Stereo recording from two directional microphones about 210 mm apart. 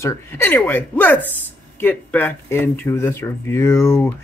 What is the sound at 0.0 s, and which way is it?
Speech, 10° left (ahead or behind).